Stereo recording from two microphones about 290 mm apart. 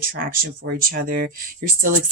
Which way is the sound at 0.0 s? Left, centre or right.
Right.